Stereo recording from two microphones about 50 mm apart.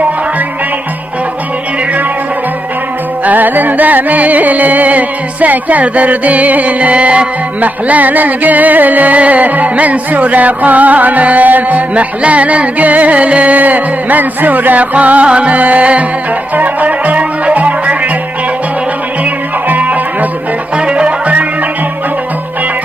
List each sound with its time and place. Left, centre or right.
3.3 s music: right
19.7 s music: right
20.7 s music: centre